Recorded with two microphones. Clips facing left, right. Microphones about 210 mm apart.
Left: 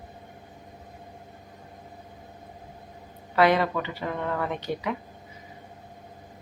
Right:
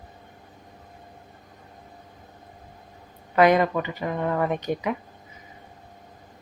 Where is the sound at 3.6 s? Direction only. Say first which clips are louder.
Right 3 dB; 15° right (ahead or behind).